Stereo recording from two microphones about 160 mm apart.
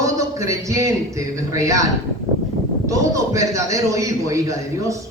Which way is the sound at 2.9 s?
20° right (ahead or behind).